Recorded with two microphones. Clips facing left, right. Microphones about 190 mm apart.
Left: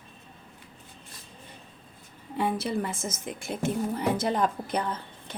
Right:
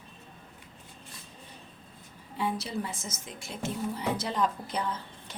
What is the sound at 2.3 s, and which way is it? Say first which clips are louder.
A woman's voice: left 4 dB; 55° left (ahead or behind).